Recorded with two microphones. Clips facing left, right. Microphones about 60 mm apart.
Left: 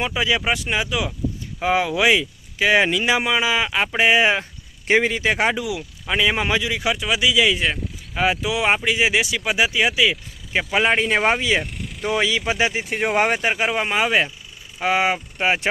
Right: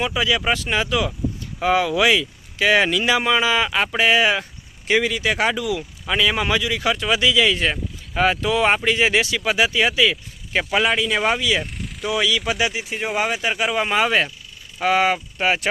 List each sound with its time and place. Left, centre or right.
0.0 s speech: left
0.4 s a man's voice: centre
3.9 s a man's voice: left
10.8 s speech: left
12.8 s speech: left
13.7 s a man's voice: centre